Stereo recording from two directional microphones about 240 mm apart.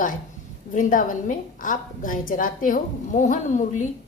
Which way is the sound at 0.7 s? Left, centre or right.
Left.